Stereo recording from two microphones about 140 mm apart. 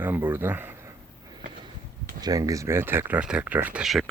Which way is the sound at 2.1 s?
25° right (ahead or behind).